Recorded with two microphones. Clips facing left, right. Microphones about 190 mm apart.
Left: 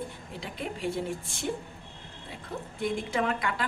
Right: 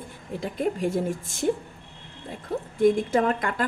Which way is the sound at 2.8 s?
45° right (ahead or behind).